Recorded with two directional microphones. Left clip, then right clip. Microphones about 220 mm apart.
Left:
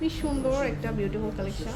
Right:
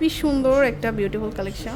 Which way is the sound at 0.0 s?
55° right (ahead or behind).